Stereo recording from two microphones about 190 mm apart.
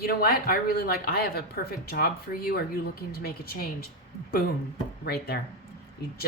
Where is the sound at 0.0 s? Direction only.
55° left (ahead or behind).